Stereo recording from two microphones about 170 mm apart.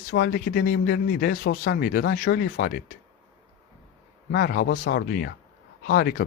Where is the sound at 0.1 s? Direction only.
65° left (ahead or behind).